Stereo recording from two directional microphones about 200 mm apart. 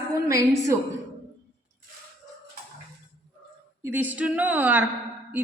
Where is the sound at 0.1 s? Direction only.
15° right (ahead or behind).